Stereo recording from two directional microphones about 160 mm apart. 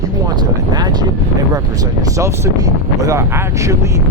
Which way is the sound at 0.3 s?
25° right (ahead or behind).